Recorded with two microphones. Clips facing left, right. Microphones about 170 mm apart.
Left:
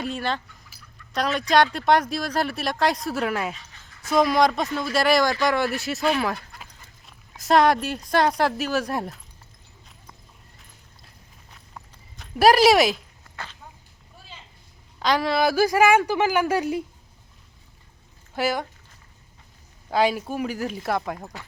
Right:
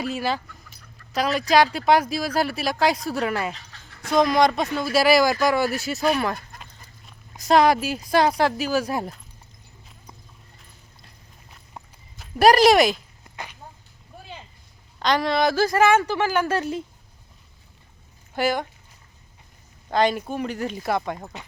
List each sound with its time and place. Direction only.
0.0 s speech: 5° right (ahead or behind)
3.5 s a sound: 75° right (ahead or behind)
4.1 s speech: 5° left (ahead or behind)
11.8 s clip-clop: 25° right (ahead or behind)
12.1 s speech: centre (ahead or behind)
13.3 s a sound: 15° right (ahead or behind)
14.9 s speech: 5° left (ahead or behind)
18.3 s speech: centre (ahead or behind)
19.9 s speech: 5° left (ahead or behind)